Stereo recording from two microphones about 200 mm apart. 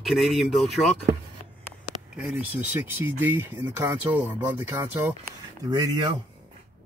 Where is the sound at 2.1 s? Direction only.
5° right (ahead or behind).